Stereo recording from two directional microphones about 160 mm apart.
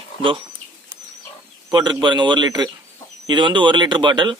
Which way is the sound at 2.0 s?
30° right (ahead or behind).